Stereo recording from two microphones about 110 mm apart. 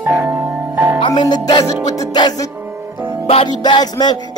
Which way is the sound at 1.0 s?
40° left (ahead or behind).